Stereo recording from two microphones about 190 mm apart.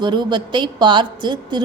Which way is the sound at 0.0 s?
25° right (ahead or behind).